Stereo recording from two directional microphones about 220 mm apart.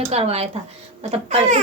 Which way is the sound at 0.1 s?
30° right (ahead or behind).